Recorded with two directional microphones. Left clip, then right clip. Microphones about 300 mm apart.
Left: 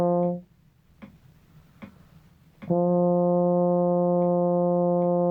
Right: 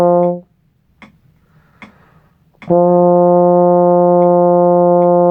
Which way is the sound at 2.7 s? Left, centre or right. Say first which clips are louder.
Right 13 dB; right.